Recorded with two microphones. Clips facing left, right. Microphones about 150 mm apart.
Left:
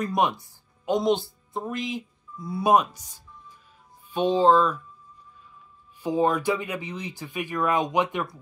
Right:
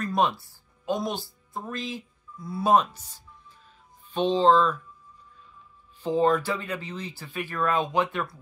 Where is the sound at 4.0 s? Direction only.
10° left (ahead or behind).